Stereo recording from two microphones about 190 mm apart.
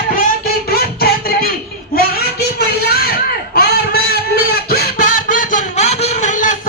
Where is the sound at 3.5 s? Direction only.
55° left (ahead or behind).